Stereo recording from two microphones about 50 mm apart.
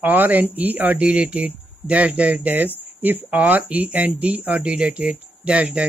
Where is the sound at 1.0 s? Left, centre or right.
Right.